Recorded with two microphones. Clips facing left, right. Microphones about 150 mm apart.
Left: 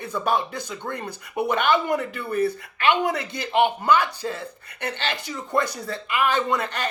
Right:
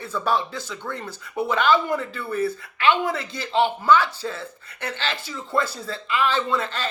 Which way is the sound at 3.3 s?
15° left (ahead or behind).